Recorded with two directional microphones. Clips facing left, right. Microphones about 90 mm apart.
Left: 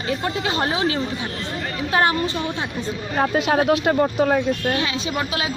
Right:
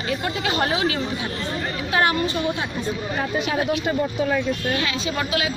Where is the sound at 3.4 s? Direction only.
60° left (ahead or behind).